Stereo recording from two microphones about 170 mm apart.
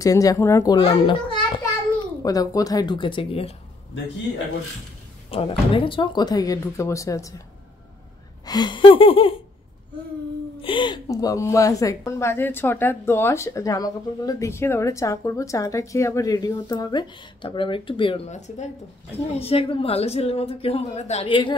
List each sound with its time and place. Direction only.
0.0 s a child's voice: 20° left (ahead or behind)
5.3 s a woman's voice: 35° left (ahead or behind)
8.5 s speech: 25° left (ahead or behind)
10.6 s a woman's voice: 30° left (ahead or behind)